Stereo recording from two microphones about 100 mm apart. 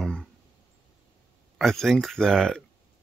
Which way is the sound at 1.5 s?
5° left (ahead or behind).